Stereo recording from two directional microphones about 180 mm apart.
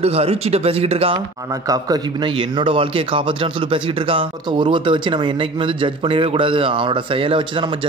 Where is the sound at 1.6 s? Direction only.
20° right (ahead or behind).